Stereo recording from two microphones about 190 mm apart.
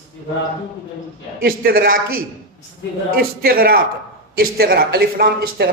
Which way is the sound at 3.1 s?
50° right (ahead or behind).